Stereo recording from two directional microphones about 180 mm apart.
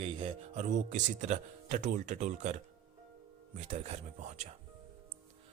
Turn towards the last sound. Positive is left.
turn(degrees=-40)  # may be behind; listen again after turning